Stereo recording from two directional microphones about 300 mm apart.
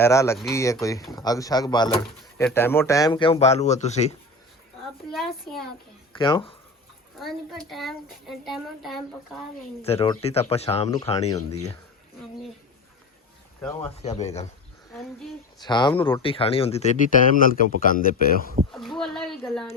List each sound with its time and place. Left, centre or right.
0.0 s speech: centre
5.1 s child singing: centre
6.1 s speech: centre
7.7 s child singing: centre
9.8 s speech: centre
13.6 s speech: centre
14.0 s speech: left
15.5 s speech: centre
16.2 s speech: centre
18.7 s speech: centre